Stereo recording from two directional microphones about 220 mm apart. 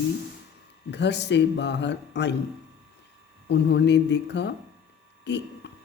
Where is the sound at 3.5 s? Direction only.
50° left (ahead or behind).